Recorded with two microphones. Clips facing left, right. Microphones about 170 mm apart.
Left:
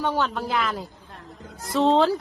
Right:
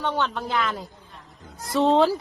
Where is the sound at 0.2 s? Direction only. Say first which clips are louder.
Left 1 dB; centre (ahead or behind).